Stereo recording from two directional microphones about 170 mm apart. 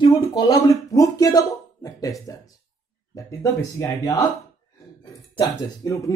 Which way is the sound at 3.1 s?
20° left (ahead or behind).